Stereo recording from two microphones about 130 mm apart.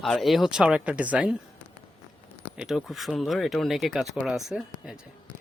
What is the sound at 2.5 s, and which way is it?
Speech, 5° right (ahead or behind).